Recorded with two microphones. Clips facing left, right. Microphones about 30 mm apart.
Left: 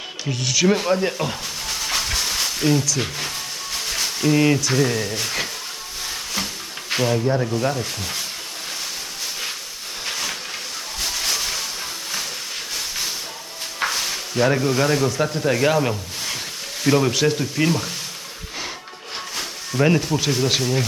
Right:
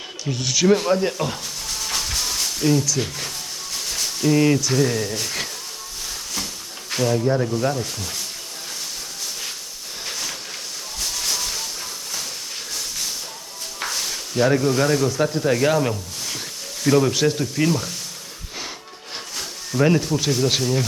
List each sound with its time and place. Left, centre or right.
0.3 s speech: centre
1.8 s a sound: centre
3.0 s speech: left
3.8 s a sound: left
4.7 s speech: centre
6.9 s speech: left
7.3 s speech: centre
7.9 s speech: left
10.1 s a sound: centre
13.8 s a sound: left
14.3 s speech: centre
19.4 s speech: centre